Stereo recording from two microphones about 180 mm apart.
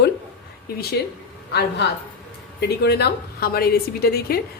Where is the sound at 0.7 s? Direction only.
55° left (ahead or behind).